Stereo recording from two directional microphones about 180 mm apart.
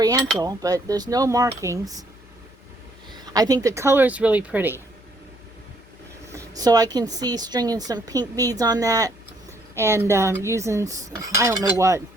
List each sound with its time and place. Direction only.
0.0 s a woman's voice: 20° right (ahead or behind)
3.3 s cutlery: 20° right (ahead or behind)
6.3 s a woman's voice: 20° right (ahead or behind)
9.7 s cutlery: 15° right (ahead or behind)